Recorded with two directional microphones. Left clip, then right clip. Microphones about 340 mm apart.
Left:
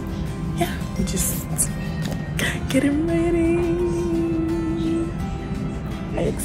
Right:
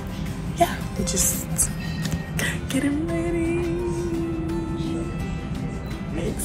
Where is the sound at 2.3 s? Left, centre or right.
Centre.